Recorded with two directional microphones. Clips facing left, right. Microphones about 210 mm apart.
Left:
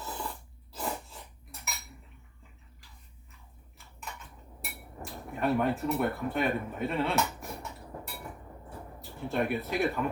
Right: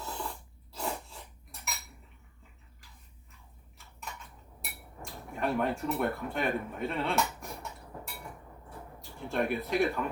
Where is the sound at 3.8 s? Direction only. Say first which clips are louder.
Even; centre (ahead or behind).